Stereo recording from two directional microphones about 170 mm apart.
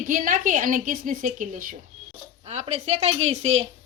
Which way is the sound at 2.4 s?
40° right (ahead or behind).